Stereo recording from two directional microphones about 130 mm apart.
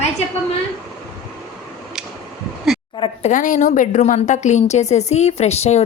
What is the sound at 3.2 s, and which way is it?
A woman's voice, 80° left.